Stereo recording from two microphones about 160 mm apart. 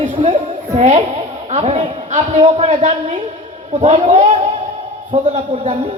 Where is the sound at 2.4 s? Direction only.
40° right (ahead or behind).